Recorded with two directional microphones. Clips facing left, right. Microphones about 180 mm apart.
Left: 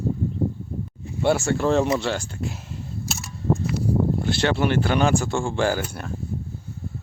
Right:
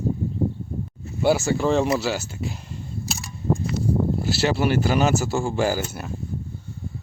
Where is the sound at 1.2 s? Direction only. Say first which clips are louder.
Right 1 dB; centre (ahead or behind).